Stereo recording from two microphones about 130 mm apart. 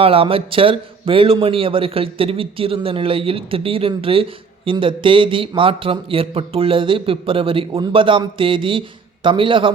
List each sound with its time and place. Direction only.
0.0 s a man's voice: 45° right (ahead or behind)